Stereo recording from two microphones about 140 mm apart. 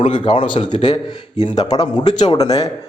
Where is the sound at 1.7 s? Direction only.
25° left (ahead or behind).